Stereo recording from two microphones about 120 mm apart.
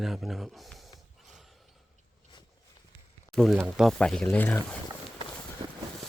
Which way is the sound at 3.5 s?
10° right (ahead or behind).